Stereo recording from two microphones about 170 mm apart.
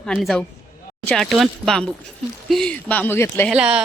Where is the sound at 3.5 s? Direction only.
5° right (ahead or behind).